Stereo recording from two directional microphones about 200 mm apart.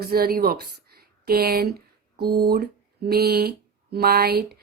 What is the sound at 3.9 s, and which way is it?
Speech, 50° right (ahead or behind).